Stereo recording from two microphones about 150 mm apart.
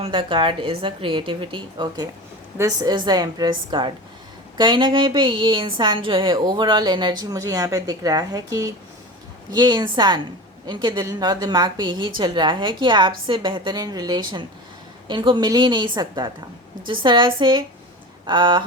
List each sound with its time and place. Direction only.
0.0 s a woman's voice: 35° right (ahead or behind)